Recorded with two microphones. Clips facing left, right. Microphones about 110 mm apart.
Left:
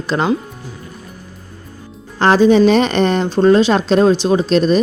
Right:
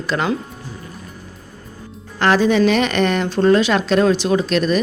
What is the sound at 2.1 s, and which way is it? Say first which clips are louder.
Speech: left 4 dB; 30° left (ahead or behind).